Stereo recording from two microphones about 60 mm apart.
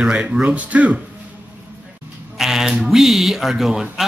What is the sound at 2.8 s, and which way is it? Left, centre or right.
A man's voice, centre.